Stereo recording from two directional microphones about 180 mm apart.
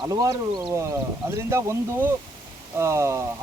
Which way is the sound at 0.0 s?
20° right (ahead or behind).